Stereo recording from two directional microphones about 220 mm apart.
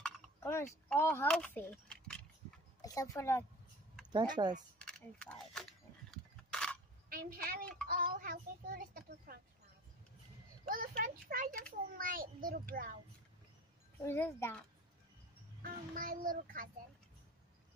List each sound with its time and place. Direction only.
0.0 s speech: 10° left (ahead or behind)
2.8 s speech: 15° left (ahead or behind)
4.1 s speech: 20° right (ahead or behind)
4.7 s speech: 5° left (ahead or behind)
6.0 s a sound: 5° left (ahead or behind)
7.1 s a woman's voice: 40° right (ahead or behind)
10.7 s a child's voice: 40° right (ahead or behind)
14.0 s speech: 10° left (ahead or behind)
15.6 s a child's voice: 40° right (ahead or behind)